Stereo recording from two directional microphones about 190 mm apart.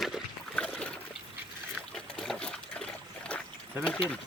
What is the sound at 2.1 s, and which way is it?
Trickle, 5° left (ahead or behind).